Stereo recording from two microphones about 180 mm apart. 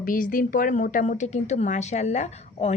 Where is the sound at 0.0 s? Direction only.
50° left (ahead or behind).